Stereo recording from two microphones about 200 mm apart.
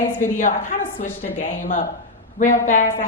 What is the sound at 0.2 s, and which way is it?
A woman's voice, 40° left (ahead or behind).